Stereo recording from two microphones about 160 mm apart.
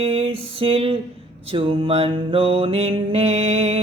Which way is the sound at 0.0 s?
40° right (ahead or behind).